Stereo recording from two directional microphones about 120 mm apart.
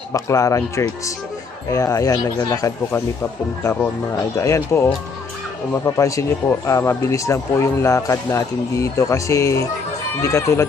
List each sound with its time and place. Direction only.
0.1 s speech: 25° left (ahead or behind)
4.4 s speech: 25° left (ahead or behind)